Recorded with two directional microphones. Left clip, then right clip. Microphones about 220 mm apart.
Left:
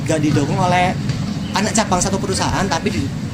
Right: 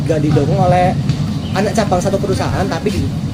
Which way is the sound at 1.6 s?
35° left (ahead or behind).